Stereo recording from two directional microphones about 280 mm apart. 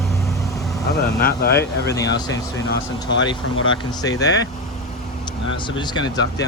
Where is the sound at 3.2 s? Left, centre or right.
Left.